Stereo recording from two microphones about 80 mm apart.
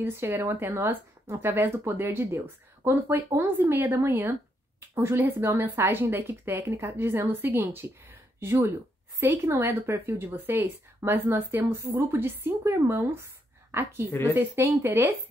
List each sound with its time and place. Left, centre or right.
0.0 s a woman's voice: right